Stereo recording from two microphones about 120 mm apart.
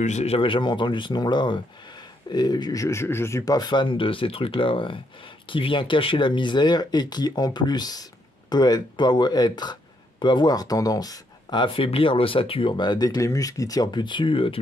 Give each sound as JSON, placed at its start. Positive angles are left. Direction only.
{"t": 0.0, "sound": "speech", "side_deg": 70}